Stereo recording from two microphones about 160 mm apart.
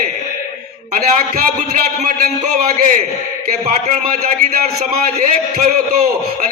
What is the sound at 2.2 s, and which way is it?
A man's voice, 50° right (ahead or behind).